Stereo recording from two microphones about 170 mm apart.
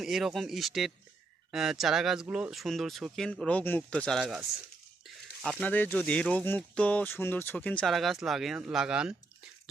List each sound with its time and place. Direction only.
0.0 s speech: centre (ahead or behind)